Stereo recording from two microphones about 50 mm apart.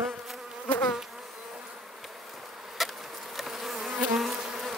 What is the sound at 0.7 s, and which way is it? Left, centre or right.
Bee, left.